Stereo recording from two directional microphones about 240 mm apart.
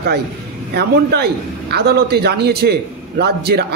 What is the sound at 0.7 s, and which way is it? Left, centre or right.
A man's voice, right.